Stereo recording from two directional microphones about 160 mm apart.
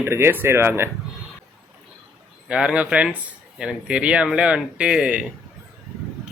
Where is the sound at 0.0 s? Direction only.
15° right (ahead or behind).